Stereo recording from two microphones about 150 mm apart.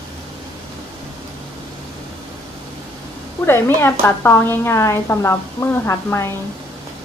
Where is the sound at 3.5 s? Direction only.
15° left (ahead or behind).